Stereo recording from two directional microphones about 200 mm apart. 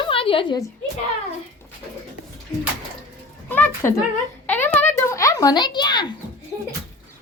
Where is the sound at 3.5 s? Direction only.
10° left (ahead or behind).